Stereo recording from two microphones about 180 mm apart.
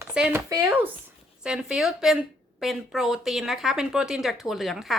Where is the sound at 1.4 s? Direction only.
5° right (ahead or behind).